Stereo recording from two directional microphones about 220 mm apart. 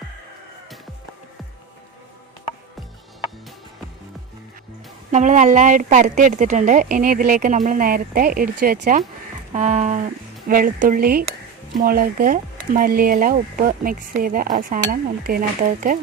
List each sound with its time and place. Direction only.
5.1 s speech: 35° right (ahead or behind)